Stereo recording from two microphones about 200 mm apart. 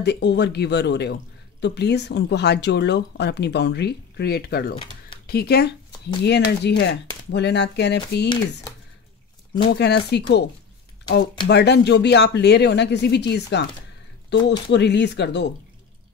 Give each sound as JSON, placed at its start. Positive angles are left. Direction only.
{"t": 0.0, "sound": "speech", "side_deg": 55}
{"t": 9.7, "sound": "speech", "side_deg": 55}
{"t": 11.4, "sound": "speech", "side_deg": 55}